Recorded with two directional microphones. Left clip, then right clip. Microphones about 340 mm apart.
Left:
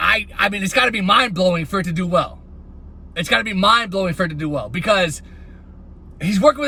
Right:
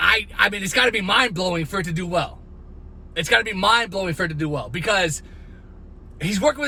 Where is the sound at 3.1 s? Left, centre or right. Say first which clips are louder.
Even; centre.